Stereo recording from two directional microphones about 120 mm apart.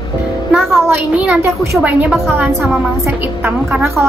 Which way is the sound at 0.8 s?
10° right (ahead or behind).